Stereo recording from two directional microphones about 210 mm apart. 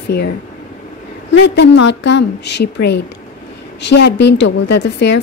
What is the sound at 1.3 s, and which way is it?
A woman's voice, 55° left (ahead or behind).